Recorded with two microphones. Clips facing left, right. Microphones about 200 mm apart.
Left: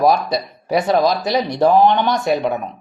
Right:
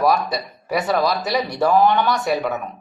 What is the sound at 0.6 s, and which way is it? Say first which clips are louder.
Speech: left 4 dB; 25° left (ahead or behind).